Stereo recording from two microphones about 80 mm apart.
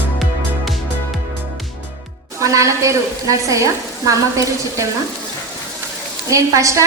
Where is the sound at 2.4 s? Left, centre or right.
Right.